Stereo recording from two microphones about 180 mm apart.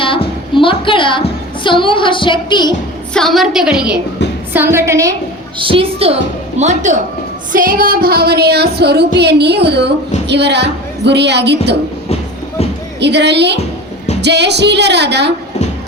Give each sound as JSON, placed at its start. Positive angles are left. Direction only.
{"t": 0.0, "sound": "music", "side_deg": 30}
{"t": 3.1, "sound": "a woman's voice", "side_deg": 0}
{"t": 4.2, "sound": "a sound", "side_deg": 70}
{"t": 4.5, "sound": "a woman's voice", "side_deg": -10}
{"t": 5.5, "sound": "a woman's voice", "side_deg": -30}
{"t": 7.5, "sound": "music", "side_deg": -50}
{"t": 9.1, "sound": "speech", "side_deg": -70}
{"t": 13.0, "sound": "speech", "side_deg": -70}